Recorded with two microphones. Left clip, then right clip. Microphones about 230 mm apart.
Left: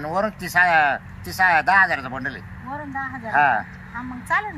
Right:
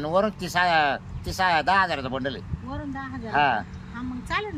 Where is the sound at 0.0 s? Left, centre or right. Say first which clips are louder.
Even; centre.